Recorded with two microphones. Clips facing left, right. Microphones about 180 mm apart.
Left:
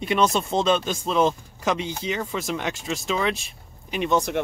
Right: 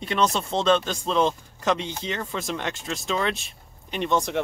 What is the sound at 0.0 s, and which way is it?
Speech, 10° left (ahead or behind).